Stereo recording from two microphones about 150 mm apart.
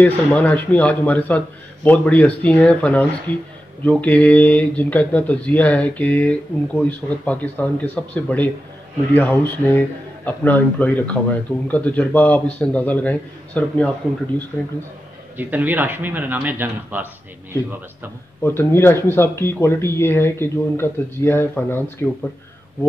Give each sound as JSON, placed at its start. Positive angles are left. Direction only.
{"t": 0.0, "sound": "speech", "side_deg": 10}
{"t": 15.3, "sound": "speech", "side_deg": -10}
{"t": 18.4, "sound": "speech", "side_deg": 15}